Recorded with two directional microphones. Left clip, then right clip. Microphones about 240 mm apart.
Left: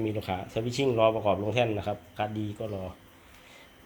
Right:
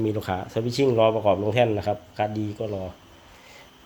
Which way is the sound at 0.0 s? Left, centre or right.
Right.